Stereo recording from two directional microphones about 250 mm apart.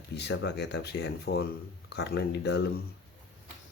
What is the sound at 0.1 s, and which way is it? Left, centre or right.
Speech, left.